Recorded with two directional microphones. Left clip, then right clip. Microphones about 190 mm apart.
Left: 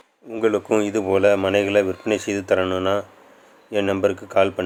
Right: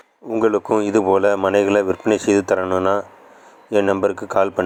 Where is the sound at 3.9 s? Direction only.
15° right (ahead or behind).